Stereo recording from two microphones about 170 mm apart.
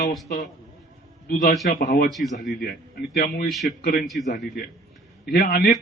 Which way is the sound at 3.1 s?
65° left (ahead or behind).